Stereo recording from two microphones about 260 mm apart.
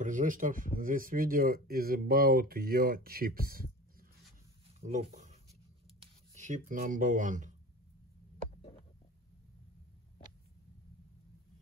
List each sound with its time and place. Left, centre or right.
0.0 s speech: right
4.7 s a sound: right
5.9 s speech: right